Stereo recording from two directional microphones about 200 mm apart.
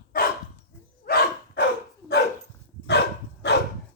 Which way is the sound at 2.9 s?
60° left (ahead or behind).